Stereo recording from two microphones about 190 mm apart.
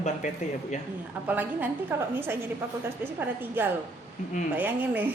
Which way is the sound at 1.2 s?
10° right (ahead or behind).